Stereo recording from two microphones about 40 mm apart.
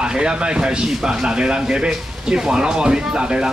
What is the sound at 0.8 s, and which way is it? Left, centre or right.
Speech, centre.